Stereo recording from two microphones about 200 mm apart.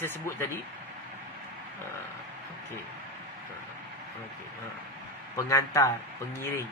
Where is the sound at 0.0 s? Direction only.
10° left (ahead or behind).